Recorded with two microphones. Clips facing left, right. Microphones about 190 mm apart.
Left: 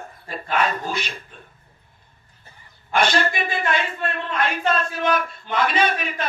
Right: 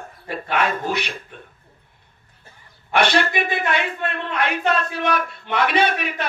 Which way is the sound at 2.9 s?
70° right (ahead or behind).